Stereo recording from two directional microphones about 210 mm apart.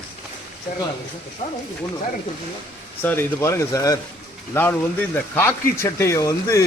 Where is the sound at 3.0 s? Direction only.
10° left (ahead or behind).